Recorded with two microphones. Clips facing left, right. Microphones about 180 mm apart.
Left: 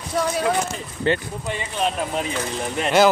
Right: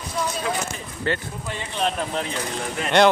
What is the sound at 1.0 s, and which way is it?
Speech, 20° left (ahead or behind).